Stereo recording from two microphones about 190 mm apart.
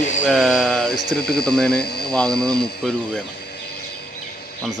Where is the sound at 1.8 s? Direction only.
55° left (ahead or behind).